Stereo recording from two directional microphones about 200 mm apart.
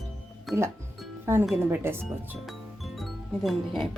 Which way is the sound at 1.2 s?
10° right (ahead or behind).